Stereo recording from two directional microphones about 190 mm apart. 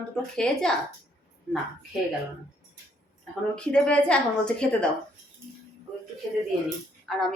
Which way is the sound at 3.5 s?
5° left (ahead or behind).